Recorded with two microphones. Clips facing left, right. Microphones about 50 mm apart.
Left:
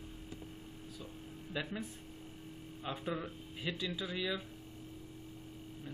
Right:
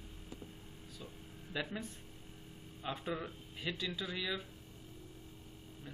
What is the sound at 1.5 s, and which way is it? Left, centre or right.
Speech, centre.